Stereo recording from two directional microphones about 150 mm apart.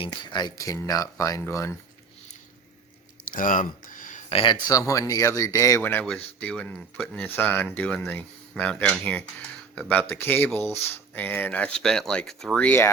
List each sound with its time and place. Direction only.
0.0 s speech: 30° left (ahead or behind)
3.2 s a sound: 65° left (ahead or behind)
4.3 s speech: 35° left (ahead or behind)
4.8 s speech: 20° left (ahead or behind)